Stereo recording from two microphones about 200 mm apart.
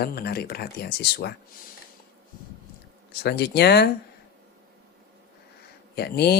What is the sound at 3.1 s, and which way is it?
Speech, 55° left (ahead or behind).